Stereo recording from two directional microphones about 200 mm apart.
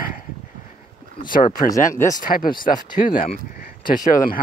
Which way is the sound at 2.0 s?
15° left (ahead or behind).